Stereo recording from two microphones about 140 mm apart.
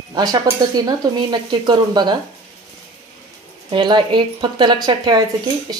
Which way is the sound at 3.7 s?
35° right (ahead or behind).